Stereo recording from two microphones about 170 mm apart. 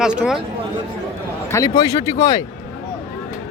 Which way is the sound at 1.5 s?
20° left (ahead or behind).